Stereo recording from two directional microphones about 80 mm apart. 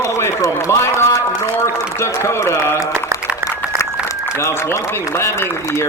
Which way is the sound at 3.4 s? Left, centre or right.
Right.